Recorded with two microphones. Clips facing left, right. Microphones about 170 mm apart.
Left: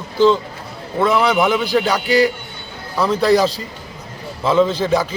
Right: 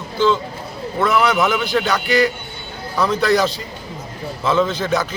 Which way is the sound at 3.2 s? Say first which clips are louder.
Left 5 dB; 30° left (ahead or behind).